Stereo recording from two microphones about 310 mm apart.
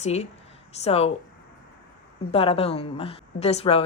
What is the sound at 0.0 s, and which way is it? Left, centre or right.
Speech, left.